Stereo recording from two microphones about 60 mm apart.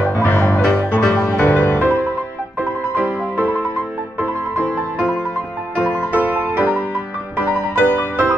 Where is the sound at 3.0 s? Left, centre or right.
Right.